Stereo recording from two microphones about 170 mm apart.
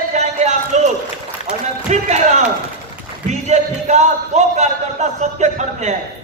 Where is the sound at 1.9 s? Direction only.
45° right (ahead or behind).